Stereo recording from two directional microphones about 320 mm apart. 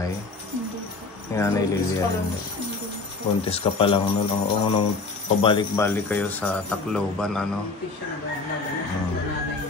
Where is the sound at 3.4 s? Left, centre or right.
Centre.